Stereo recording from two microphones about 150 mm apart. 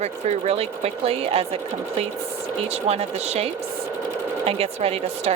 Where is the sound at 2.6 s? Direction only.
45° right (ahead or behind).